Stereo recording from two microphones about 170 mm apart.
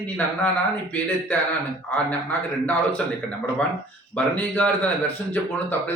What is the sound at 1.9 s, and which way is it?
Speech, 10° left (ahead or behind).